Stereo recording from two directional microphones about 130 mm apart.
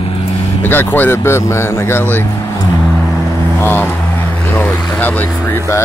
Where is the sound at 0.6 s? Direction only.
15° left (ahead or behind).